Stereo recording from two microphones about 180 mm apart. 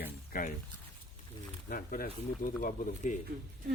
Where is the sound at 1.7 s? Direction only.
55° left (ahead or behind).